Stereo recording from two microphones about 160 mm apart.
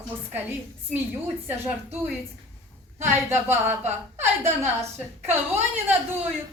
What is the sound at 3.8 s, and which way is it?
Speech, 45° right (ahead or behind).